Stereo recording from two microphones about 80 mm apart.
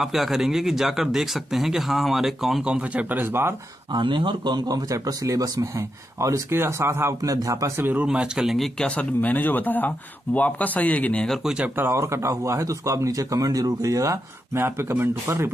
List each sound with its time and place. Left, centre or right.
0.0 s speech: centre
2.6 s a man's voice: centre
3.9 s speech: right
7.2 s speech: right
7.7 s a man's voice: right; by 8.8 s centre
8.8 s speech: centre
11.4 s a man's voice: centre
11.7 s speech: right